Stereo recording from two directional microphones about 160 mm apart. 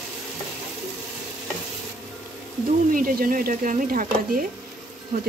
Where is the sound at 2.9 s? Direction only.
60° right (ahead or behind).